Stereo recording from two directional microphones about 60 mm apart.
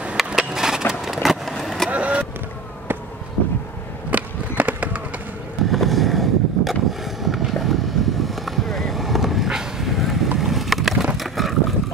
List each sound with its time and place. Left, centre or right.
0.4 s skateboard: centre
1.0 s vehicle: centre
1.6 s skateboard: centre
1.9 s vehicle: right
4.1 s skateboard: right
5.7 s boat: centre